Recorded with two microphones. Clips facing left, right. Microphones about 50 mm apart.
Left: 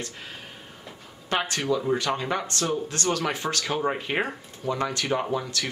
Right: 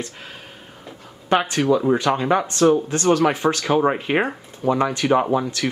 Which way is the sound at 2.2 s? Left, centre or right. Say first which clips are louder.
Right 11 dB; right.